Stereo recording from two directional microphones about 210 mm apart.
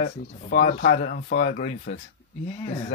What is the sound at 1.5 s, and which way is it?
Speech, 35° left (ahead or behind).